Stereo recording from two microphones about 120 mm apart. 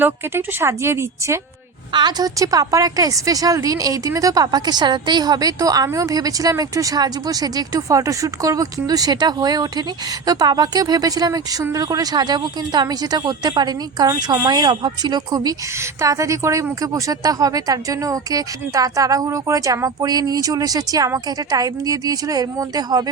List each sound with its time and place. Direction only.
0.0 s speech: 20° right (ahead or behind)
1.9 s a woman's voice: 40° right (ahead or behind)